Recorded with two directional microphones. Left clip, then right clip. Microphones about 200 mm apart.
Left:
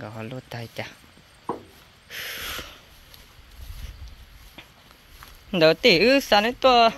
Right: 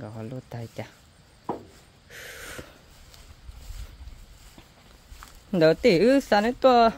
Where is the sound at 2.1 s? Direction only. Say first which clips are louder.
Left 8 dB; 20° right (ahead or behind).